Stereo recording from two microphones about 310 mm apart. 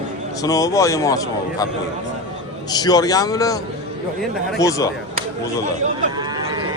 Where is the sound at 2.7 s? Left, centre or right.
Centre.